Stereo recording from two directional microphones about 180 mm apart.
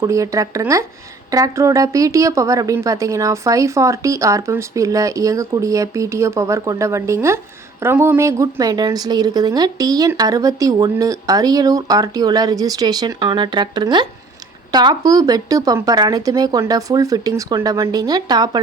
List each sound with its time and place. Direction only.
0.0 s a woman's voice: 20° right (ahead or behind)